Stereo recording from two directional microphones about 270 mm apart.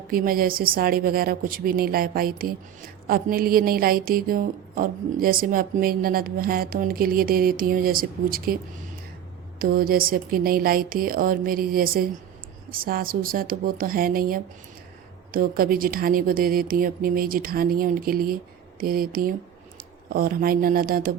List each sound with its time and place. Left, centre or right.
0.1 s a woman's voice: right
9.6 s a woman's voice: right